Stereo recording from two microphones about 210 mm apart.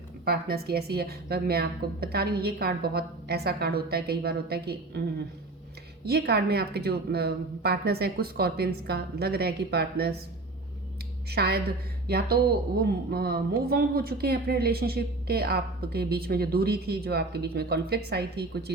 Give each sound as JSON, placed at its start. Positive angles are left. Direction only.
{"t": 0.3, "sound": "a woman's voice", "side_deg": -50}
{"t": 11.3, "sound": "a woman's voice", "side_deg": -50}